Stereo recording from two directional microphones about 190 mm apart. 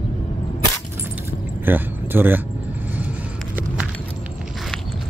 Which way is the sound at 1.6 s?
10° right (ahead or behind).